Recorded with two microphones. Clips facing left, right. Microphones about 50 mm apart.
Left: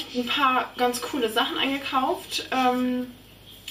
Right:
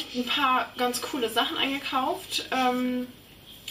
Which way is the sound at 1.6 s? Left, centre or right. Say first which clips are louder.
Left 3 dB; centre.